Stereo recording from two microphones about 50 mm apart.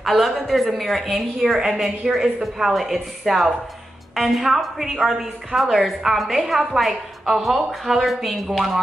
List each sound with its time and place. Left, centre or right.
0.0 s a woman's voice: centre